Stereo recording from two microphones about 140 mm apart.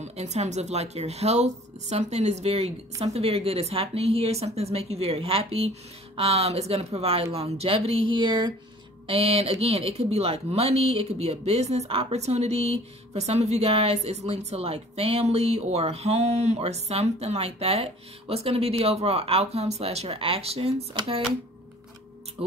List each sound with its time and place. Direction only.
0.0 s speech: 55° right (ahead or behind); by 8.5 s 35° right (ahead or behind)
9.0 s speech: 45° right (ahead or behind)